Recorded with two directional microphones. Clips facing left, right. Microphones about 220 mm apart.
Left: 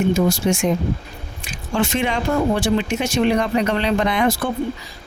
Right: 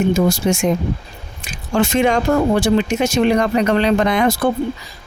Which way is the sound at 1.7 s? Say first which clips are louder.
Right 5 dB; 40° right (ahead or behind).